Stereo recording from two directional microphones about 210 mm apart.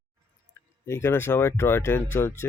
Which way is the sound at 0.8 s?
10° left (ahead or behind).